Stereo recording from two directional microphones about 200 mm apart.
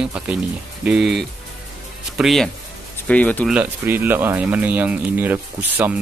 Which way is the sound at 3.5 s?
10° right (ahead or behind).